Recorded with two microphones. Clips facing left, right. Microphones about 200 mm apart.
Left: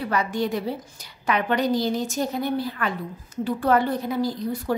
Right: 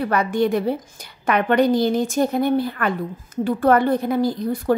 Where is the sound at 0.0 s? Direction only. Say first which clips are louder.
Right 5 dB; 55° right (ahead or behind).